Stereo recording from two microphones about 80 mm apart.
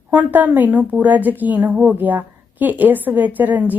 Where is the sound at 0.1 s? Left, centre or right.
Right.